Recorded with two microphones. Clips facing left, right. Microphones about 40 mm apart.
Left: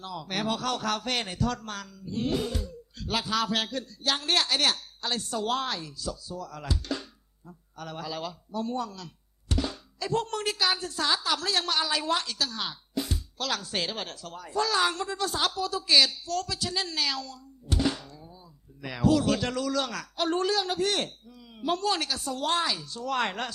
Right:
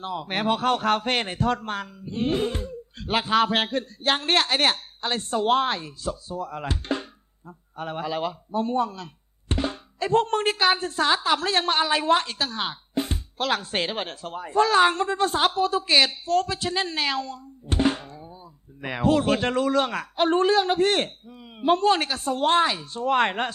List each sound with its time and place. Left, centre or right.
0.0 s speech: right